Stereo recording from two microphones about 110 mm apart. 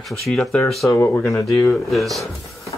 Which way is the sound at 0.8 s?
25° left (ahead or behind).